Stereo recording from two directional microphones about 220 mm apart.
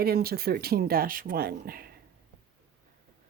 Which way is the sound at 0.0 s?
45° right (ahead or behind).